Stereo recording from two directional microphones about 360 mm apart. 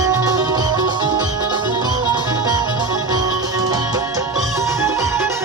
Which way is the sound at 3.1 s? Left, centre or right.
Centre.